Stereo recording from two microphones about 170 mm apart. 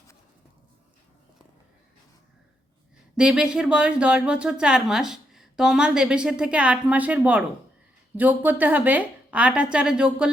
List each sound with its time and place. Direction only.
3.2 s a woman's voice: 5° right (ahead or behind)